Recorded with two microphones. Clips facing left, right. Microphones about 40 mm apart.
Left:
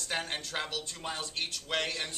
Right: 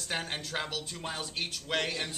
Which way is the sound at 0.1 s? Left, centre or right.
Centre.